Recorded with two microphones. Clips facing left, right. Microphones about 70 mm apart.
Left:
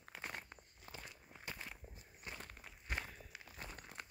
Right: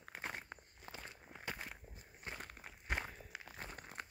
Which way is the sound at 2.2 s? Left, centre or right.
Right.